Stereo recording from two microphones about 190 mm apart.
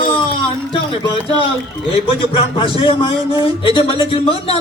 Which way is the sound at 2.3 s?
25° left (ahead or behind).